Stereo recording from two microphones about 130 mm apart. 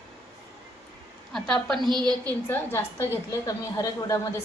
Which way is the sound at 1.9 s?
35° right (ahead or behind).